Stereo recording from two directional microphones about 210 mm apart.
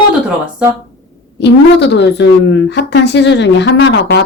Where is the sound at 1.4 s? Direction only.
55° left (ahead or behind).